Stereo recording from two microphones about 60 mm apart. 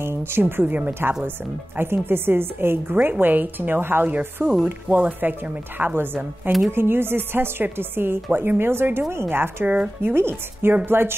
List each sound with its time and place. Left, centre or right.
0.0 s speech: right
1.8 s a woman's voice: right
4.8 s speech: right
5.9 s a woman's voice: right